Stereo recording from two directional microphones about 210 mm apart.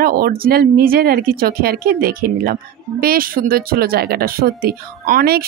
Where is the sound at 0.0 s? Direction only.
45° right (ahead or behind).